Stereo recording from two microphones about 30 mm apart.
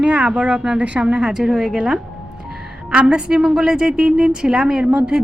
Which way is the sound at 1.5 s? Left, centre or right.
Centre.